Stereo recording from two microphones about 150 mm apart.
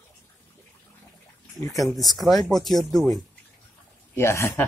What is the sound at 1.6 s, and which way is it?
Speech, 20° left (ahead or behind).